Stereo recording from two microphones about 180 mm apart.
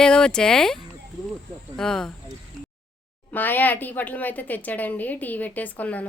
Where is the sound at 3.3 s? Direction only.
10° left (ahead or behind).